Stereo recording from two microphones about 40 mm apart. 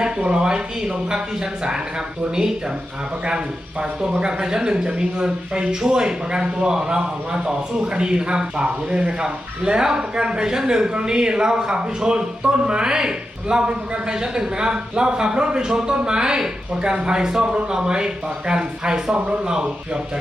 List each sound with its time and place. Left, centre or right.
0.3 s speech: right
3.2 s speech: centre